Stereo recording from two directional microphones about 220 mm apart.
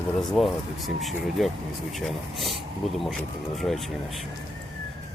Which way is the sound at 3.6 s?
Centre (ahead or behind).